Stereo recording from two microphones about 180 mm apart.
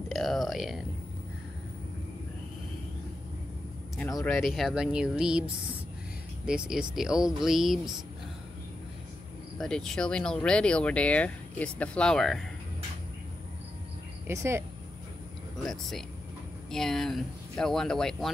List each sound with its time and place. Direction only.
0.1 s a sound: centre (ahead or behind)
4.3 s speech: centre (ahead or behind)
6.4 s speech: 5° right (ahead or behind)
9.6 s speech: 5° left (ahead or behind)
14.2 s speech: 15° right (ahead or behind)
15.6 s speech: centre (ahead or behind)